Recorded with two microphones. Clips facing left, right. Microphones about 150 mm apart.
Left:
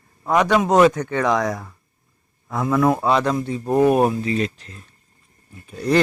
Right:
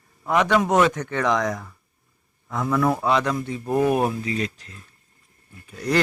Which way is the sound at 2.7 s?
25° left (ahead or behind).